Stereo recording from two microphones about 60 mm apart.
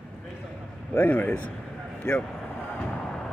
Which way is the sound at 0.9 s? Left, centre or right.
Left.